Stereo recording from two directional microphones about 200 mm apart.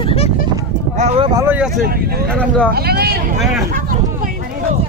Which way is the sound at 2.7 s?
50° right (ahead or behind).